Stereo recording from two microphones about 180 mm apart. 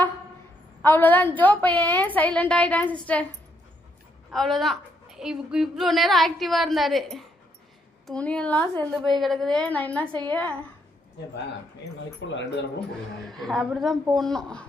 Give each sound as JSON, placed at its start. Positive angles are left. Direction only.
{"t": 0.8, "sound": "a woman's voice", "side_deg": 10}
{"t": 4.3, "sound": "a woman's voice", "side_deg": 0}
{"t": 12.2, "sound": "speech", "side_deg": 90}
{"t": 13.2, "sound": "a woman's voice", "side_deg": 0}